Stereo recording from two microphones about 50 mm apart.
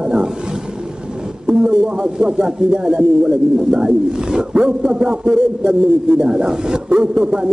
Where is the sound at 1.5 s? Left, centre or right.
Right.